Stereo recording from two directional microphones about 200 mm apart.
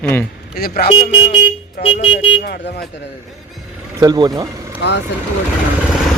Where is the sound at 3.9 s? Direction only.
20° right (ahead or behind).